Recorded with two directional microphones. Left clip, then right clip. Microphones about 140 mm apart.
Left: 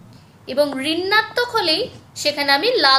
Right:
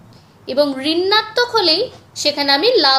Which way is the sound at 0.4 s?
25° right (ahead or behind).